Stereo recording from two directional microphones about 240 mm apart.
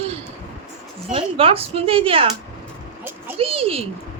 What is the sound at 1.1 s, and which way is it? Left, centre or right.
Speech, right.